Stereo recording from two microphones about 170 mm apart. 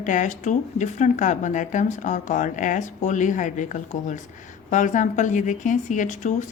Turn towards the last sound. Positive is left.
turn(degrees=45)  # may be behind; listen again after turning